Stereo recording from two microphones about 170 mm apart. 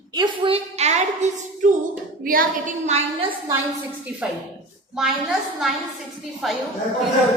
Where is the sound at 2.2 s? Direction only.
55° right (ahead or behind); by 3.3 s 35° right (ahead or behind).